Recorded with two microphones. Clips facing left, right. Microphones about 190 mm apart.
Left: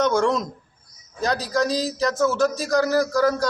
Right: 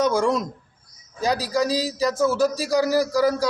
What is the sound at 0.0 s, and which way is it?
A man's voice, 10° right (ahead or behind).